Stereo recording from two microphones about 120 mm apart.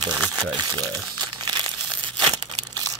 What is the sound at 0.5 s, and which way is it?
Crumpling, 35° right (ahead or behind).